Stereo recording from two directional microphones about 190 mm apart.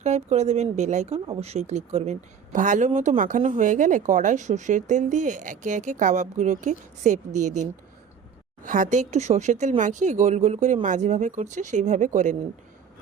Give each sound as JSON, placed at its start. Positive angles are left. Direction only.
{"t": 0.0, "sound": "speech", "side_deg": -35}